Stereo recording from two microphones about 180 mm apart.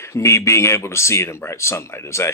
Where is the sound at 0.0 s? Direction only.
15° left (ahead or behind).